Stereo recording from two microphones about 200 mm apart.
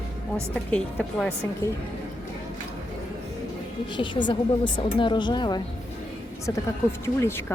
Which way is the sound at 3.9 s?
25° left (ahead or behind).